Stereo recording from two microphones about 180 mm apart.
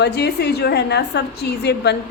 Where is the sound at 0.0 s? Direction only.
65° left (ahead or behind).